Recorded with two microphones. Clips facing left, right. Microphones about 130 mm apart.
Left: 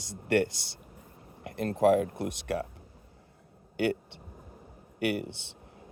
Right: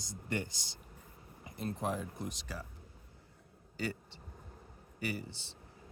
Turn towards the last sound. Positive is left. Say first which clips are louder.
# left 9 dB
turn(degrees=65)  # may be behind; listen again after turning